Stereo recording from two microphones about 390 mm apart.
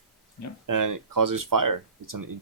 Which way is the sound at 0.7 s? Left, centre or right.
Right.